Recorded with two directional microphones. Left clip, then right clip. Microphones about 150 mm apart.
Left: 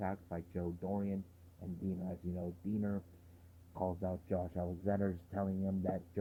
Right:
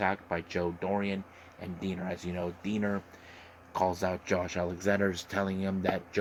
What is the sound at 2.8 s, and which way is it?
Speech, 10° right (ahead or behind).